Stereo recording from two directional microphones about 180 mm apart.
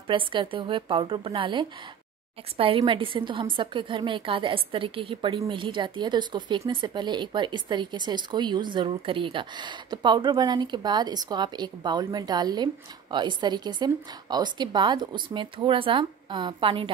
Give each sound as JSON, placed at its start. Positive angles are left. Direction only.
{"t": 0.1, "sound": "a woman's voice", "side_deg": -30}